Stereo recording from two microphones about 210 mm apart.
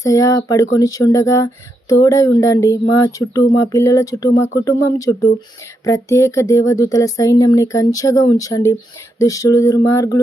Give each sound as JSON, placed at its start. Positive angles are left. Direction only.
{"t": 0.0, "sound": "speech", "side_deg": 15}